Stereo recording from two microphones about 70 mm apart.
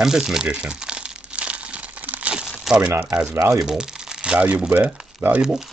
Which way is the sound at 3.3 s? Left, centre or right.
Right.